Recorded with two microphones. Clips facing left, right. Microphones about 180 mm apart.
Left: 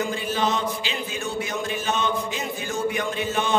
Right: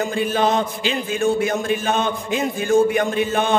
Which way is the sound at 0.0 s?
55° right (ahead or behind).